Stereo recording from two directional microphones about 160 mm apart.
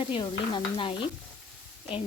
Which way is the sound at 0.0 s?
30° left (ahead or behind).